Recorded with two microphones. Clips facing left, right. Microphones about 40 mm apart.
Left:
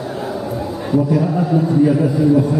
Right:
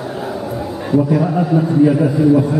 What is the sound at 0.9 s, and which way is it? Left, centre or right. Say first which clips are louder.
A man's voice: right 2 dB; centre.